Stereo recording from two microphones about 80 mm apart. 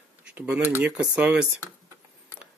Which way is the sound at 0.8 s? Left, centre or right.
Centre.